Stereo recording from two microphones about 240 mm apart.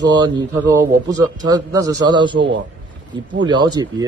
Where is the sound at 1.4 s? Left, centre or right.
Centre.